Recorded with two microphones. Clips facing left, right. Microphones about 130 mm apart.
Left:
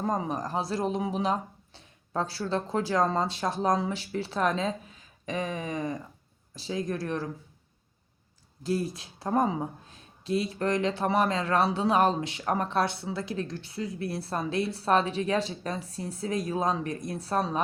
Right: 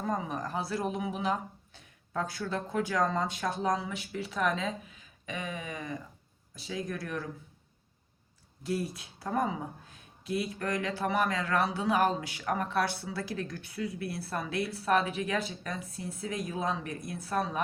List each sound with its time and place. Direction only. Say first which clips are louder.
0.0 s speech: left 4 dB; 35° left (ahead or behind)
8.6 s speech: left 4 dB; 30° left (ahead or behind)